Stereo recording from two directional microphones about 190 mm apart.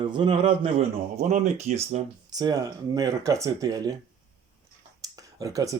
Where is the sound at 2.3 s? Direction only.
20° right (ahead or behind).